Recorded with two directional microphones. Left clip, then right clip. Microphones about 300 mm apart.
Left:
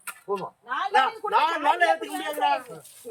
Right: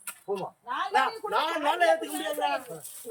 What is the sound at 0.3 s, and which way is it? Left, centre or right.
Speech, centre.